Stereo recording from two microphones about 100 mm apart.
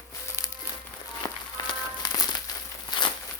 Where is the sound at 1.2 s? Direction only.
40° left (ahead or behind).